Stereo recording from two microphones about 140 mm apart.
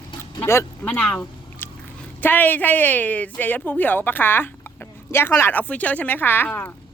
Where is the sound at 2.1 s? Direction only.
15° left (ahead or behind).